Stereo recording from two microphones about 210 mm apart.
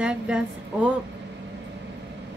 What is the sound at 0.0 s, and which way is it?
Speech, 5° right (ahead or behind).